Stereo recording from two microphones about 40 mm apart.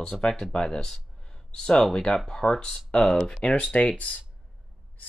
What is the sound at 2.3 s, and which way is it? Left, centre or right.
Speech, centre.